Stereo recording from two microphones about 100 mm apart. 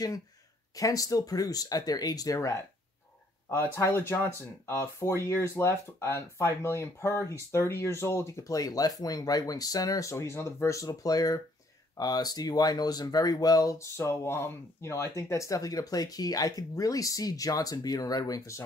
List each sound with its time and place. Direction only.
0.7 s speech: 35° left (ahead or behind)